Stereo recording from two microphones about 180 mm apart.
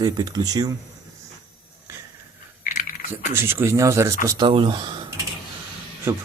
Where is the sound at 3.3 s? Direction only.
15° right (ahead or behind).